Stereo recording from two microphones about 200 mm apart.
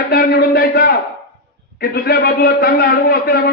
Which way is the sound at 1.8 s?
50° left (ahead or behind).